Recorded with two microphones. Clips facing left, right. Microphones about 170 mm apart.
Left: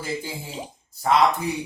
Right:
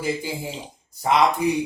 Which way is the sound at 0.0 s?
15° right (ahead or behind).